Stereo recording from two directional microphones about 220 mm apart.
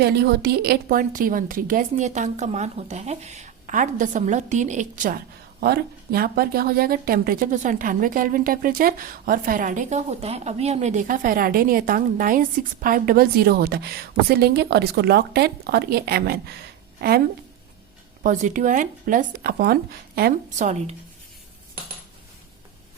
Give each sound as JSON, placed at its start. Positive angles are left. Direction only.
{"t": 0.0, "sound": "a woman's voice", "side_deg": -45}